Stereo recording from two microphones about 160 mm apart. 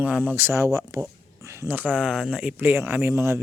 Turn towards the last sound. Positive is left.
turn(degrees=-15)  # may be behind; listen again after turning